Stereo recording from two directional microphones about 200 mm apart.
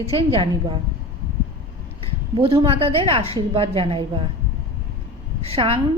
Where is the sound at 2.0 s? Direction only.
25° right (ahead or behind).